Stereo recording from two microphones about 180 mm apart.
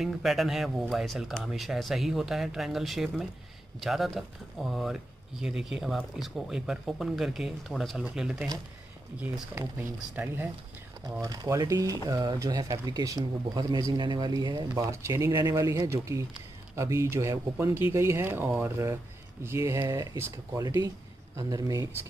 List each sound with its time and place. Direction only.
0.0 s speech: centre (ahead or behind); by 21.8 s 20° right (ahead or behind)